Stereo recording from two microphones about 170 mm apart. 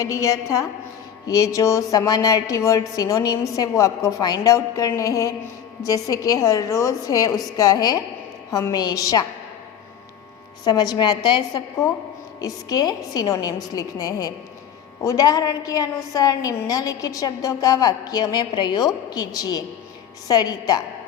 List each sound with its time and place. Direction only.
0.0 s a woman's voice: 20° left (ahead or behind)
10.6 s a woman's voice: 25° left (ahead or behind)